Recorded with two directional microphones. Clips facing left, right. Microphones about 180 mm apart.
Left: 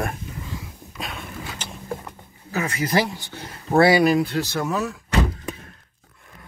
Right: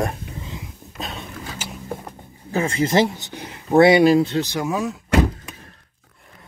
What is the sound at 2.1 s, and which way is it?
Speech, 30° right (ahead or behind).